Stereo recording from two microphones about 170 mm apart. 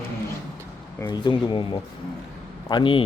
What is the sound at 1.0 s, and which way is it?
Speech, 25° left (ahead or behind).